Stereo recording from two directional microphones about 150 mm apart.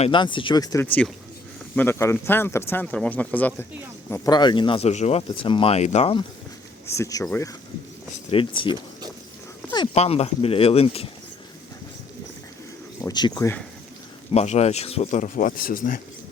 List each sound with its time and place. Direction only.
0.0 s speech: 35° left (ahead or behind)
0.9 s speech: 10° left (ahead or behind)
4.3 s speech: 30° left (ahead or behind)
4.9 s speech: 45° left (ahead or behind)
6.8 s speech: 20° left (ahead or behind)
8.3 s speech: 35° left (ahead or behind)
9.9 s speech: 45° left (ahead or behind)
13.0 s speech: 25° left (ahead or behind)
14.3 s speech: 45° left (ahead or behind); by 16.0 s 70° left (ahead or behind)